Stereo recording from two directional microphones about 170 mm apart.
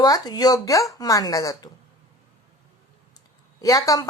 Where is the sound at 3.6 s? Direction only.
20° left (ahead or behind).